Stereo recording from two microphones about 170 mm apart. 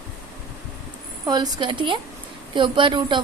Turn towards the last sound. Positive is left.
turn(degrees=-25)  # may be behind; listen again after turning